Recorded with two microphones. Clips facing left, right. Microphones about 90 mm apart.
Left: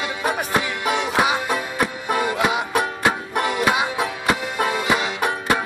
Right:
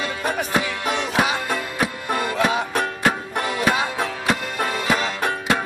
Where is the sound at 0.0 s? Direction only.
15° left (ahead or behind).